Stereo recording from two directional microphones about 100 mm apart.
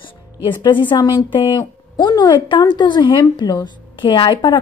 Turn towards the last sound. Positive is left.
turn(degrees=50)  # may be behind; listen again after turning